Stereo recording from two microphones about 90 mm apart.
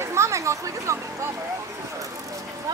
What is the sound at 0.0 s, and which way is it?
Chatter, 30° right (ahead or behind).